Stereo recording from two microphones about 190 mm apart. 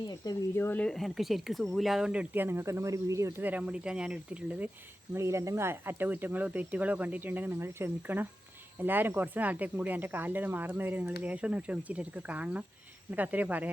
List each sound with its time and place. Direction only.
0.1 s speech: 15° left (ahead or behind); by 13.7 s 10° right (ahead or behind)